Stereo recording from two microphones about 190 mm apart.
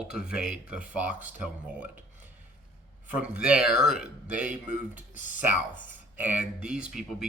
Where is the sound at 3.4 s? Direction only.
5° right (ahead or behind).